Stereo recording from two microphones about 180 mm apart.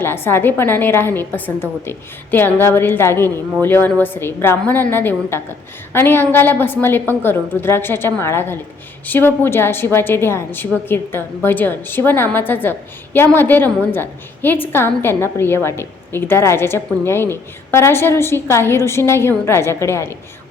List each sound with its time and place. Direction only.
0.0 s a woman's voice: 10° left (ahead or behind)